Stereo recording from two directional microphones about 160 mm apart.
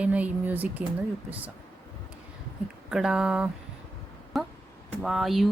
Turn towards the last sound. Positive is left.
turn(degrees=0)  # may be behind; listen again after turning